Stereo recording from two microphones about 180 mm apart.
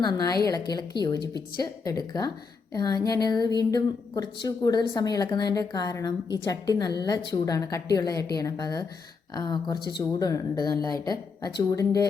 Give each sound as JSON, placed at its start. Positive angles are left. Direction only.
{"t": 0.0, "sound": "a woman's voice", "side_deg": 20}